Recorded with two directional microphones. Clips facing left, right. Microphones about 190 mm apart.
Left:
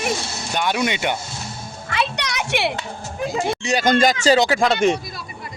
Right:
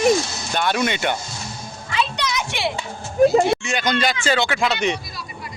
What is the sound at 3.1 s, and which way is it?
Speech, 40° right (ahead or behind).